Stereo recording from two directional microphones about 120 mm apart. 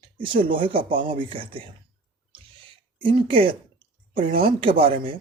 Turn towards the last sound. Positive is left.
turn(degrees=-50)  # may be behind; listen again after turning